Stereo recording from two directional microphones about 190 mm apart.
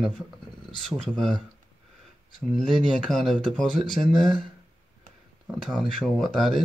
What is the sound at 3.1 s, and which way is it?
Speech, centre (ahead or behind).